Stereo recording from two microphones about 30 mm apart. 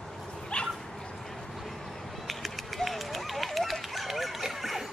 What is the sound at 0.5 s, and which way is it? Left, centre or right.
Dog, left.